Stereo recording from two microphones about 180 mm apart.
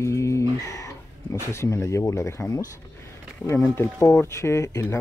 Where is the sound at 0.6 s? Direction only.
20° left (ahead or behind).